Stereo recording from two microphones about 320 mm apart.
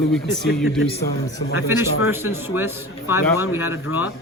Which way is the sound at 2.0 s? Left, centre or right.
Centre.